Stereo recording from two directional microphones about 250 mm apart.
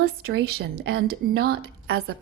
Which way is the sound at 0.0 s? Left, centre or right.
Right.